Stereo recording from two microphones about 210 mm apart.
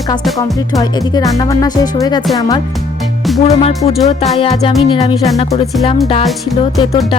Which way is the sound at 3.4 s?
30° left (ahead or behind).